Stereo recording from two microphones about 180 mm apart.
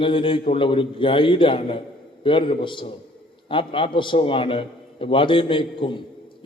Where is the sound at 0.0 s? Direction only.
30° left (ahead or behind).